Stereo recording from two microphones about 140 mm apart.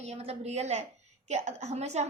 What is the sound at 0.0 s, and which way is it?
A woman's voice, 45° right (ahead or behind).